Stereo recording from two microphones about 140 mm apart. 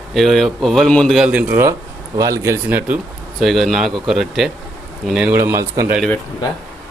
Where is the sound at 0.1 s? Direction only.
Centre (ahead or behind).